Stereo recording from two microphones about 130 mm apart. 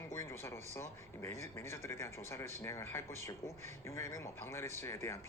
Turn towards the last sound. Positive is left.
turn(degrees=20)  # may be behind; listen again after turning